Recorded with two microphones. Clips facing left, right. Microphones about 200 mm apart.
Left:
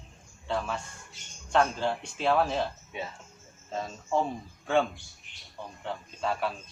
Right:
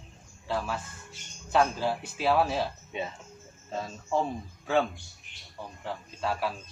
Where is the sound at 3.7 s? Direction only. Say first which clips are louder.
Even; centre (ahead or behind).